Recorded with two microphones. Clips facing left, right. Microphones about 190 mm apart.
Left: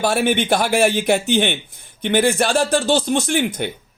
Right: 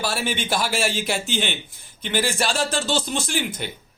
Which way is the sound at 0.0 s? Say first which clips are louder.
Left 8 dB; 55° left (ahead or behind).